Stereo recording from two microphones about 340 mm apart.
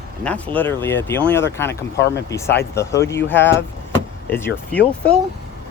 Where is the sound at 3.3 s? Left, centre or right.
Left.